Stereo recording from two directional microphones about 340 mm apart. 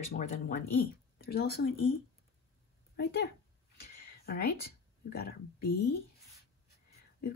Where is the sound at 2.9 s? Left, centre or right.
Left.